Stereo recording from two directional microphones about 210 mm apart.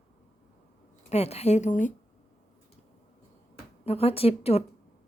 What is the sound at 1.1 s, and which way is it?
Speech, 30° left (ahead or behind).